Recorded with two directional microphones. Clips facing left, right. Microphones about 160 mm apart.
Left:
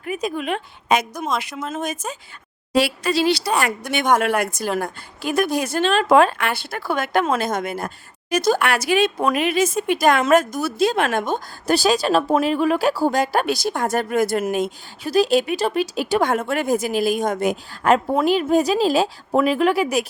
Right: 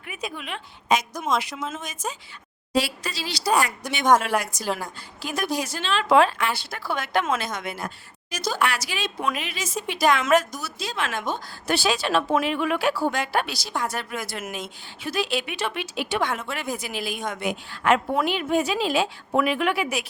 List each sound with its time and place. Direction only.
0.0 s a woman's voice: 40° left (ahead or behind)